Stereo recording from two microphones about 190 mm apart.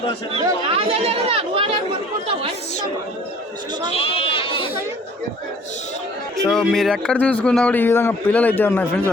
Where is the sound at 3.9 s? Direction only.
30° left (ahead or behind).